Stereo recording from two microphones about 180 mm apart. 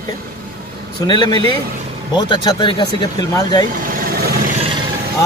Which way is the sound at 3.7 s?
55° right (ahead or behind).